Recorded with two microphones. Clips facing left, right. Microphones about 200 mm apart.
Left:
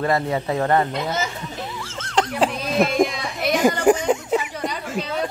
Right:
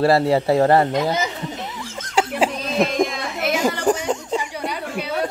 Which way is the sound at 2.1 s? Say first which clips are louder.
Right 1 dB; 5° right (ahead or behind).